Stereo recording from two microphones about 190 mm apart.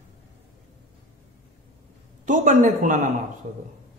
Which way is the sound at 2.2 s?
40° right (ahead or behind).